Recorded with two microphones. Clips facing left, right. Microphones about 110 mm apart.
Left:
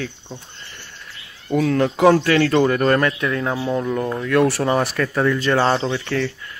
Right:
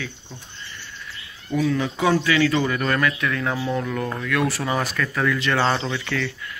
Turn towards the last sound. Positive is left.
turn(degrees=35)  # may be behind; listen again after turning